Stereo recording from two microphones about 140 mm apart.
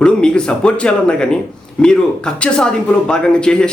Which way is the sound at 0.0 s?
5° left (ahead or behind).